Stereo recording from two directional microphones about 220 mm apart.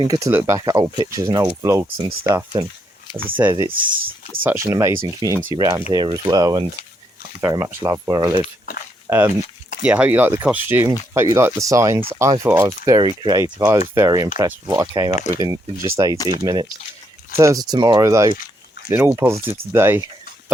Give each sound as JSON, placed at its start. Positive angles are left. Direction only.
{"t": 0.0, "sound": "speech", "side_deg": -15}
{"t": 3.8, "sound": "speech", "side_deg": -40}
{"t": 4.4, "sound": "speech", "side_deg": -10}